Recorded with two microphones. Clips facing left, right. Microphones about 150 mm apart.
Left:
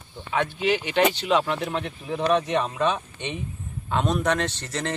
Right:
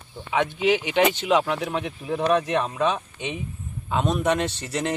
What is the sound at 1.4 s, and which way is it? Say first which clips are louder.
Speech: right 1 dB; 5° right (ahead or behind).